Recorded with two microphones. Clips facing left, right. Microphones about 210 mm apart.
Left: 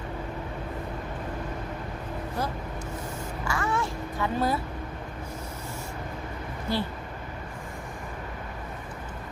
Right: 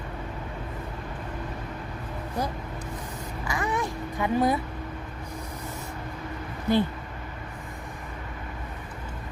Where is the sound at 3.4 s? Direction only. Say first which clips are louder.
Even; 20° right (ahead or behind).